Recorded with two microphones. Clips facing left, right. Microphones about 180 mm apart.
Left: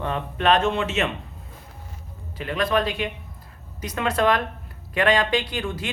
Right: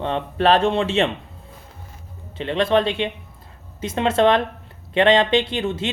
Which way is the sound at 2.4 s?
25° right (ahead or behind).